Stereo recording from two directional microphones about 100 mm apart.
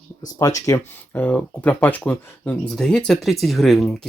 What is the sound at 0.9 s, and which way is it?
Speech, 20° left (ahead or behind).